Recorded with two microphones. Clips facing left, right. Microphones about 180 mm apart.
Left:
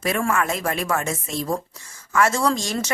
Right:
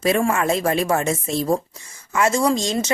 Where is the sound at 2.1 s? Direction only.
20° right (ahead or behind).